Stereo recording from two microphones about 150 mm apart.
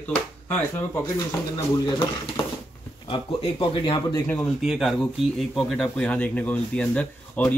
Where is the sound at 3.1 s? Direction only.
35° left (ahead or behind).